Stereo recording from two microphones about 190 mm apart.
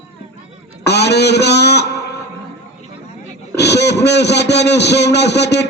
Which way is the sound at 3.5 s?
60° left (ahead or behind).